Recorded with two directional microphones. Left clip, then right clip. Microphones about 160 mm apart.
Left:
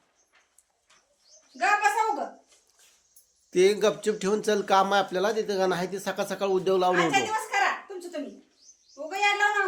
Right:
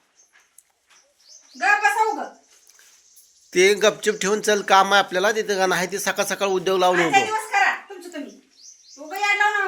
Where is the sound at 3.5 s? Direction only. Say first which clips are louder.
Right 5 dB; 5° right (ahead or behind).